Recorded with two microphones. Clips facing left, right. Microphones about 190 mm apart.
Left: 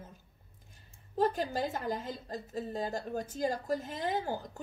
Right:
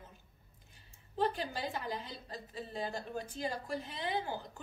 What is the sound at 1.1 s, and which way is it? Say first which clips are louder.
A woman's voice: left 4 dB; 40° left (ahead or behind).